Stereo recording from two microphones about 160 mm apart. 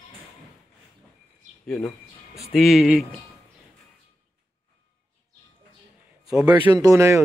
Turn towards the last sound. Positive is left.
turn(degrees=-20)  # may be behind; listen again after turning